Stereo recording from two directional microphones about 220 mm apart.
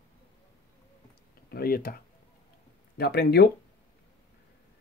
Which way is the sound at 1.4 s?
45° left (ahead or behind).